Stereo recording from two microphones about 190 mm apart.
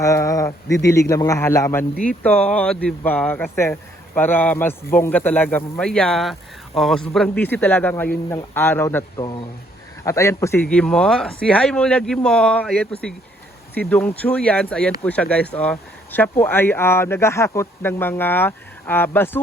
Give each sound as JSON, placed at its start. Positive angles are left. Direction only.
{"t": 0.0, "sound": "speech", "side_deg": 15}
{"t": 9.1, "sound": "speech", "side_deg": 25}